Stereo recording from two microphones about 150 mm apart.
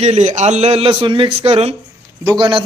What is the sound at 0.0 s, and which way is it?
A man's voice, 50° right (ahead or behind).